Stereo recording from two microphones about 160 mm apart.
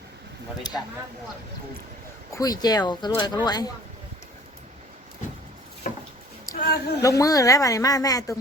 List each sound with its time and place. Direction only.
0.7 s a woman's voice: 25° left (ahead or behind)
2.3 s a woman's voice: 25° left (ahead or behind)
6.5 s a sound: 70° left (ahead or behind)
7.0 s a woman's voice: 20° left (ahead or behind)